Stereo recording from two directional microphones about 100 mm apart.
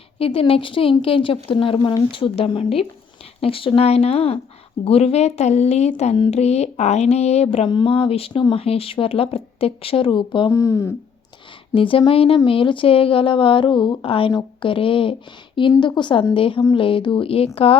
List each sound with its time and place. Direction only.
0.2 s a woman's voice: 70° left (ahead or behind)
1.8 s speech: 50° left (ahead or behind)
2.3 s speech: 70° left (ahead or behind); by 7.7 s 90° left
7.7 s a woman's voice: 55° left (ahead or behind)
8.3 s speech: 50° left (ahead or behind)
8.5 s speech: 75° left (ahead or behind); by 10.5 s 55° left (ahead or behind)
10.5 s speech: 30° left (ahead or behind)
11.7 s a woman's voice: 65° left (ahead or behind)
15.8 s speech: 50° left (ahead or behind)
16.3 s a woman's voice: 60° left (ahead or behind)